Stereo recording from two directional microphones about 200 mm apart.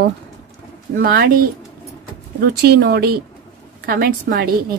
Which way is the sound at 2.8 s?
50° right (ahead or behind).